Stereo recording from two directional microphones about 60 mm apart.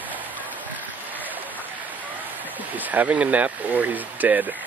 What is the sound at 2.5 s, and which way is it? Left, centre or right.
Speech, right.